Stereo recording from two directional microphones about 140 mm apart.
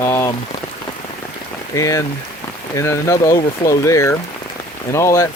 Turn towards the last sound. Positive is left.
turn(degrees=20)  # may be behind; listen again after turning